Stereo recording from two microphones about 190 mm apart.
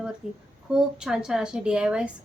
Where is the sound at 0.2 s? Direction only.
5° right (ahead or behind).